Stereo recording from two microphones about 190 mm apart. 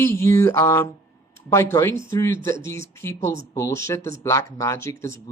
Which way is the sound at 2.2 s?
15° left (ahead or behind).